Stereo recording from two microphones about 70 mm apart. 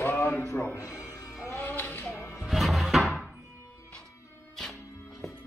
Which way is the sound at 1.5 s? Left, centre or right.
Left.